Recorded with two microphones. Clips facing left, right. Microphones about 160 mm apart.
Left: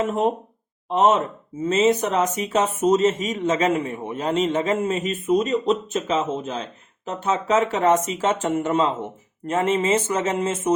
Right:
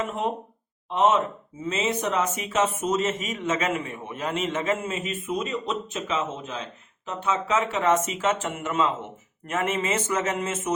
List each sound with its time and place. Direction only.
0.0 s speech: 40° left (ahead or behind)